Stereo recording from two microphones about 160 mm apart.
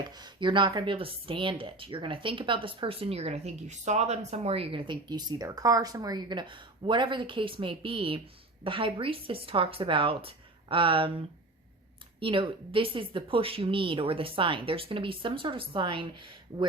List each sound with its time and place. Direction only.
0.0 s speech: 25° right (ahead or behind)